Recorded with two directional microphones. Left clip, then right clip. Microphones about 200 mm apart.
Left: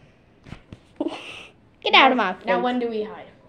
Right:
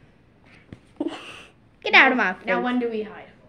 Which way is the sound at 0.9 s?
15° right (ahead or behind).